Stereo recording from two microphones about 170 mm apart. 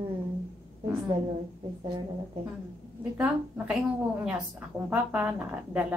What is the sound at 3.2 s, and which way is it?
Speech, 10° right (ahead or behind).